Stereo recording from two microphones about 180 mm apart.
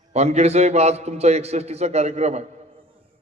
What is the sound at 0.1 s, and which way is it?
A man's voice, 35° right (ahead or behind).